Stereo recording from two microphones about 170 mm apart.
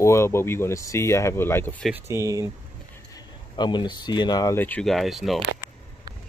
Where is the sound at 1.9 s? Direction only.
15° right (ahead or behind).